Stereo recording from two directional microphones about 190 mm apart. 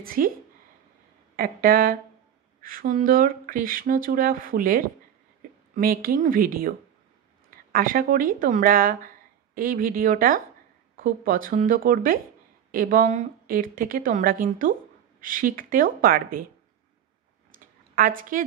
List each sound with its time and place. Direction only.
0.0 s a woman's voice: 50° right (ahead or behind)
1.3 s a woman's voice: 50° right (ahead or behind)
7.7 s a woman's voice: 45° right (ahead or behind)
17.5 s a sound: 45° right (ahead or behind)